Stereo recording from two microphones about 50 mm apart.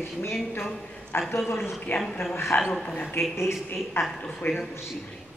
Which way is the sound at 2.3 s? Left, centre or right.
Left.